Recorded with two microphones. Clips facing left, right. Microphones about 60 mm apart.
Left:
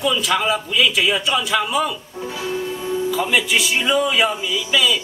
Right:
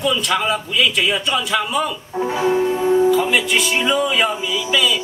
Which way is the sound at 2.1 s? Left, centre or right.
Right.